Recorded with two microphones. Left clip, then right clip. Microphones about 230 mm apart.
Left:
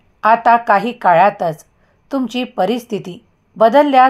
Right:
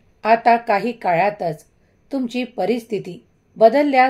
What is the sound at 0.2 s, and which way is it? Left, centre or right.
A woman's voice, left.